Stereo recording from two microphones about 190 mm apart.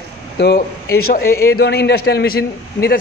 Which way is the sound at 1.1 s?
55° left (ahead or behind).